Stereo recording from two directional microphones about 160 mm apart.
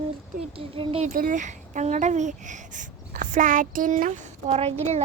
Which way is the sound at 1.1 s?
55° right (ahead or behind).